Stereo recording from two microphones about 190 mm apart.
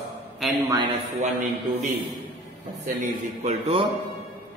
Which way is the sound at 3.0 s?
40° right (ahead or behind).